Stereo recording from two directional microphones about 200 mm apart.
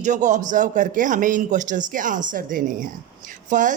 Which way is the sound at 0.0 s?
40° right (ahead or behind).